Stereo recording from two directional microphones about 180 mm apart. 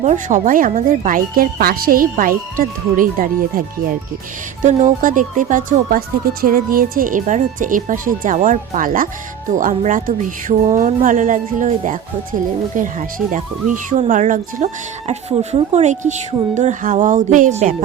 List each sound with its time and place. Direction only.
0.0 s speech: 40° right (ahead or behind)
4.6 s speech: 45° right (ahead or behind)